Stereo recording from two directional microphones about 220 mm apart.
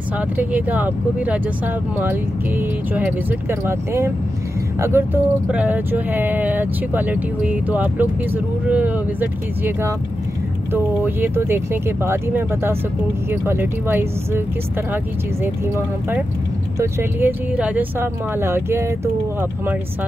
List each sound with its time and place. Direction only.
0.4 s speech: 5° right (ahead or behind)
16.7 s speech: 10° right (ahead or behind)